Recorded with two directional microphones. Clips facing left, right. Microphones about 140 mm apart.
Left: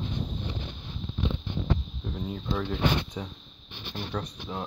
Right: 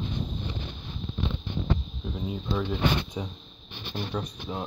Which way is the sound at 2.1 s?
10° right (ahead or behind).